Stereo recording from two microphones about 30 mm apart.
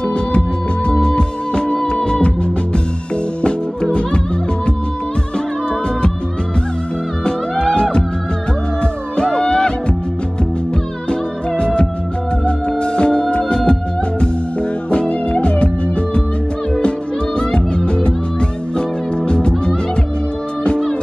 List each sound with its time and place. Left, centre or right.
0.0 s music: left
7.7 s music: left
9.1 s music: left
11.1 s music: left
14.9 s music: left
17.4 s music: left